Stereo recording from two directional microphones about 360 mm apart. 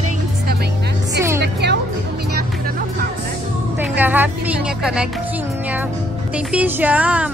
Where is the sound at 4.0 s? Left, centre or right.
Centre.